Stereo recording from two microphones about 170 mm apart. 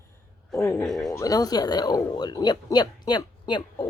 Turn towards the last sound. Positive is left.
turn(degrees=25)  # may be behind; listen again after turning